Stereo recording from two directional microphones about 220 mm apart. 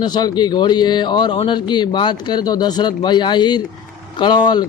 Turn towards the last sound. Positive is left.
turn(degrees=20)  # may be behind; listen again after turning